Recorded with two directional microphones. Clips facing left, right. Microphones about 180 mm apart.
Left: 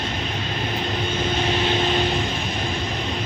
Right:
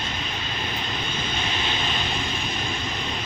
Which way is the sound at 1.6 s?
55° left (ahead or behind).